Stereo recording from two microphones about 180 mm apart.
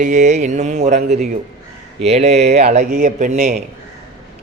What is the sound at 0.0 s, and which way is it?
Speech, 40° right (ahead or behind).